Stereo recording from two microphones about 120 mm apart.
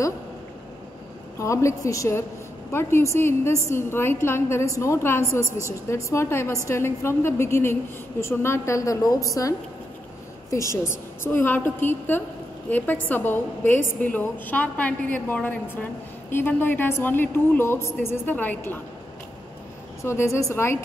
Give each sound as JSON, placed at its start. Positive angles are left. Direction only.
{"t": 1.4, "sound": "a woman's voice", "side_deg": 25}
{"t": 20.0, "sound": "a woman's voice", "side_deg": 25}